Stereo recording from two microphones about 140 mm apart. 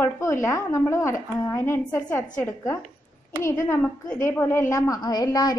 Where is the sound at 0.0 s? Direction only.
20° left (ahead or behind).